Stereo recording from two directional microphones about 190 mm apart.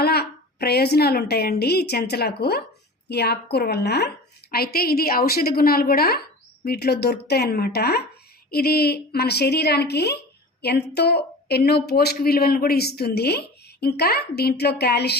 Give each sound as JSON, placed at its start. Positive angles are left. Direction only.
{"t": 0.0, "sound": "a woman's voice", "side_deg": 55}